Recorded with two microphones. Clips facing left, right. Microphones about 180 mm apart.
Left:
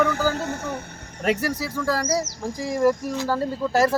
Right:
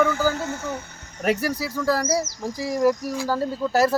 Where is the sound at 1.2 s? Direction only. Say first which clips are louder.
Even; 10° right (ahead or behind).